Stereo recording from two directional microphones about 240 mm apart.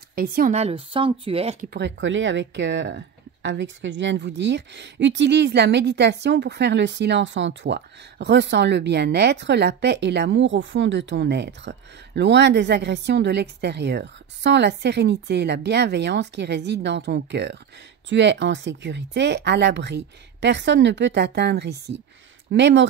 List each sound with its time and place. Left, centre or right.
0.1 s speech: right
1.7 s a woman's voice: right